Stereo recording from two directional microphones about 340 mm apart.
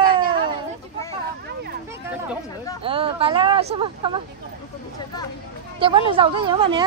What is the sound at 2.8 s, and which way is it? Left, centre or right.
Speech, centre.